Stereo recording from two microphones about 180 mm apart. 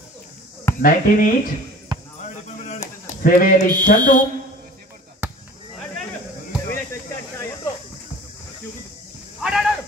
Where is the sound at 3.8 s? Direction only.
45° left (ahead or behind).